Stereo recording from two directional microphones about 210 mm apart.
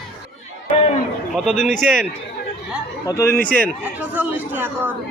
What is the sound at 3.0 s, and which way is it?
Speech, 15° left (ahead or behind).